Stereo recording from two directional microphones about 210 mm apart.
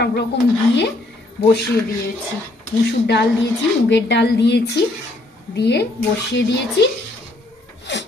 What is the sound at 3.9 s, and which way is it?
A woman's voice, 55° left (ahead or behind).